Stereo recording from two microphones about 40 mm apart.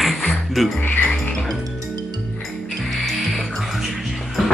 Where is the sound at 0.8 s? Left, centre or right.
Left.